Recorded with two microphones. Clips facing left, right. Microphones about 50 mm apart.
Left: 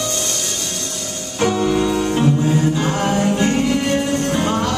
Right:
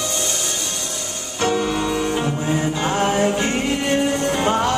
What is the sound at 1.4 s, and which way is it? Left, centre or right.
Music, centre.